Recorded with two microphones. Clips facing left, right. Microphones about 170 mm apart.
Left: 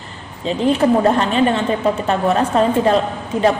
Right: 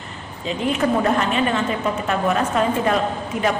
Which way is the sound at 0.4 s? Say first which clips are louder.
Left 6 dB; 30° left (ahead or behind).